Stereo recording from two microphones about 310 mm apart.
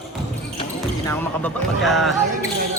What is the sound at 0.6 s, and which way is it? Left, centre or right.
Speech, centre.